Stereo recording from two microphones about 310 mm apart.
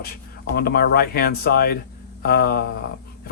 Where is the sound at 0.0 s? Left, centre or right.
Left.